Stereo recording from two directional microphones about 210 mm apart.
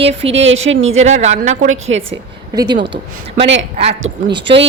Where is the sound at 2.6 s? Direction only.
50° right (ahead or behind).